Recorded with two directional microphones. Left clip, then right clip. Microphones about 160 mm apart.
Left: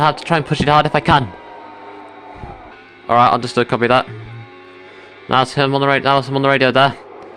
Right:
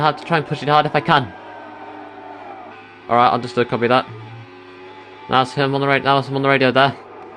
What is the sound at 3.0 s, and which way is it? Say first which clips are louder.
A man's voice: left 3 dB; 30° left (ahead or behind).